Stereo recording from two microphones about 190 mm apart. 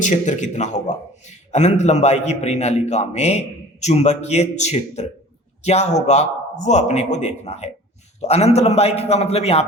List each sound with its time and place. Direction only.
0.0 s a man's voice: 40° left (ahead or behind)